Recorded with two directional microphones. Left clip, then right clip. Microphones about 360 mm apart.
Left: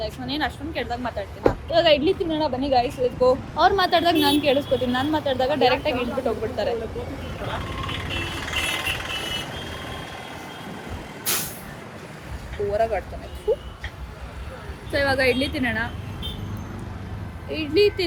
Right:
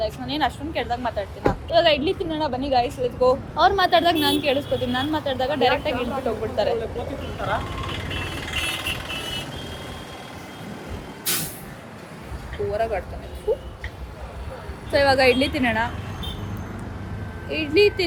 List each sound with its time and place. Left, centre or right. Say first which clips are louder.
0.0 s speech: right 3 dB; centre
8.4 s music: left 1 dB; centre
11.3 s vehicle: even; centre
12.7 s speech: left 2 dB; centre
14.9 s speech: right 4 dB; centre
17.5 s speech: right 1 dB; centre